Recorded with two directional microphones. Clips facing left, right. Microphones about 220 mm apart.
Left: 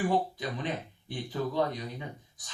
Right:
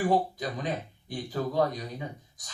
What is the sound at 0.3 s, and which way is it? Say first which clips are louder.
Speech: right 2 dB; 40° right (ahead or behind).